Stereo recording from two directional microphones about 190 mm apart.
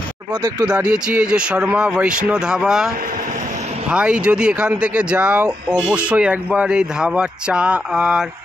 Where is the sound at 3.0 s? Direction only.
45° right (ahead or behind).